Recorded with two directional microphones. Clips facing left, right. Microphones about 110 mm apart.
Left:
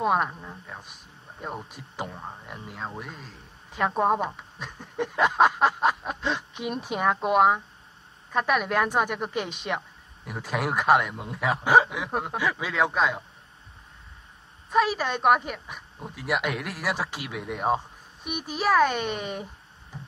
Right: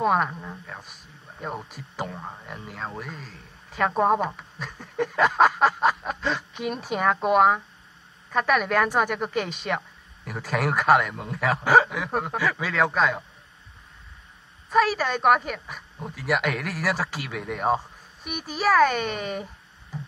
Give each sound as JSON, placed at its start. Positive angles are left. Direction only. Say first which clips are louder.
{"t": 0.0, "sound": "a sound", "louder": "right 2 dB", "side_deg": 10}
{"t": 1.5, "sound": "speech", "louder": "right 2 dB", "side_deg": -5}
{"t": 2.5, "sound": "speech", "louder": "right 2 dB", "side_deg": 10}
{"t": 4.6, "sound": "a sound", "louder": "right 2 dB", "side_deg": 20}
{"t": 4.9, "sound": "a sound", "louder": "right 2 dB", "side_deg": 5}
{"t": 6.5, "sound": "speech", "louder": "right 2 dB", "side_deg": 5}
{"t": 8.8, "sound": "a woman's voice", "louder": "right 2 dB", "side_deg": 20}
{"t": 9.1, "sound": "speech", "louder": "right 3 dB", "side_deg": 10}
{"t": 10.6, "sound": "speech", "louder": "right 1 dB", "side_deg": 5}
{"t": 14.7, "sound": "speech", "louder": "right 2 dB", "side_deg": 15}
{"t": 16.9, "sound": "a woman's voice", "louder": "right 2 dB", "side_deg": 20}